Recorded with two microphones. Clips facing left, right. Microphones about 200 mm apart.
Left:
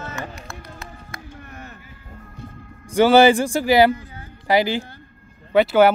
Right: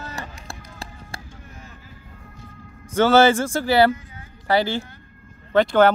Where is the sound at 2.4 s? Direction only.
60° left (ahead or behind).